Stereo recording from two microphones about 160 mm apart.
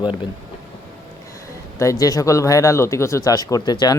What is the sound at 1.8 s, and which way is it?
Speech, 20° left (ahead or behind).